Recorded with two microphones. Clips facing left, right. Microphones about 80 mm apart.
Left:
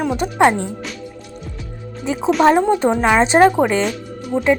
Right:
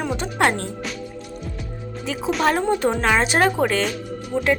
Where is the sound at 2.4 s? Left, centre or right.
Left.